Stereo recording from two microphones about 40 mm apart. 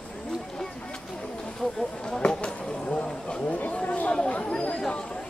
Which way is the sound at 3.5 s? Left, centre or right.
Left.